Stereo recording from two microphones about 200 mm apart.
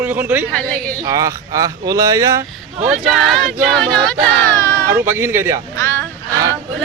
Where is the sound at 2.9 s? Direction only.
Centre (ahead or behind); by 4.9 s 15° left (ahead or behind).